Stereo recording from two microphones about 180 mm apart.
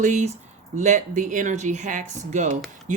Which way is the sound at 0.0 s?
40° right (ahead or behind).